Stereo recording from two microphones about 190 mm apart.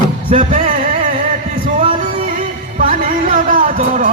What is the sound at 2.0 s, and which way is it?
Music, 45° right (ahead or behind).